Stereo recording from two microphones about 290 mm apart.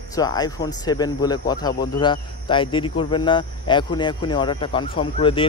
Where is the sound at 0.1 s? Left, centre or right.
Centre.